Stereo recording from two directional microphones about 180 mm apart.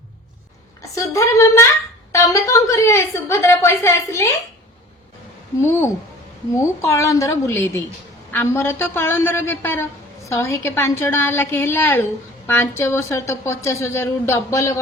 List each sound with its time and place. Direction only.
0.8 s speech: 20° left (ahead or behind)
6.6 s speech: 15° left (ahead or behind)